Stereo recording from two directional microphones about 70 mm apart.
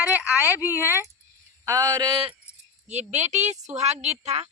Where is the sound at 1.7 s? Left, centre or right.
Right.